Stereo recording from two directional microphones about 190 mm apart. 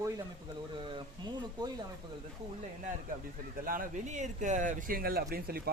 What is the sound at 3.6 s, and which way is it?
Speech, 45° right (ahead or behind).